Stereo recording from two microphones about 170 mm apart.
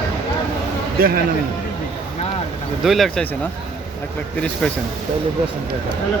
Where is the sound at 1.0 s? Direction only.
60° right (ahead or behind).